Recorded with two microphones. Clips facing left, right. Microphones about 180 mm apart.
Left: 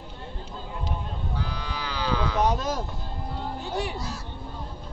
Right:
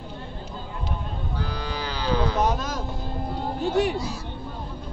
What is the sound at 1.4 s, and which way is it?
Cattle, 40° right (ahead or behind).